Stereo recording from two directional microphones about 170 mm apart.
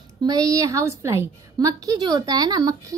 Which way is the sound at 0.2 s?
20° right (ahead or behind).